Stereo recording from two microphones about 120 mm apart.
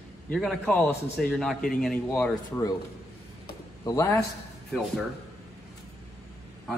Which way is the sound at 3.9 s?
30° left (ahead or behind).